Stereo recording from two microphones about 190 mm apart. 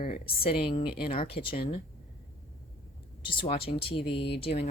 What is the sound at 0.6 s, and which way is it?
Speech, 30° left (ahead or behind).